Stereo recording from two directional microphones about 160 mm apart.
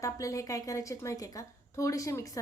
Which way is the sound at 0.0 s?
20° left (ahead or behind).